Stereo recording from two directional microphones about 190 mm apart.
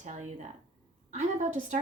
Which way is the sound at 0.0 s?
35° right (ahead or behind).